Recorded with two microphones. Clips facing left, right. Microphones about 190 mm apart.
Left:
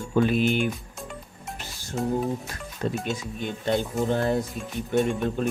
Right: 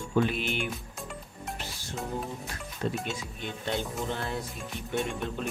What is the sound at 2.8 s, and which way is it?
Speech, 45° left (ahead or behind).